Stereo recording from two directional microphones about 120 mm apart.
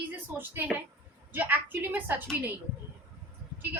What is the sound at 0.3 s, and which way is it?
A woman's voice, 15° right (ahead or behind).